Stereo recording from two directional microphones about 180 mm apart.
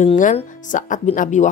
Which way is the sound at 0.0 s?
45° left (ahead or behind).